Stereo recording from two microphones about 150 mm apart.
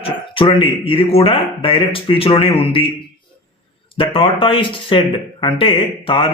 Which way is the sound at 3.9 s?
35° left (ahead or behind).